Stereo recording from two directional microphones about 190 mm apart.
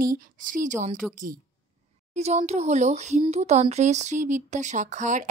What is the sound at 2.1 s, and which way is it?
Speech, 35° right (ahead or behind).